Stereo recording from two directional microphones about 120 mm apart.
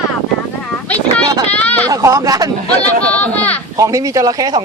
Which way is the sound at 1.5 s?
15° left (ahead or behind).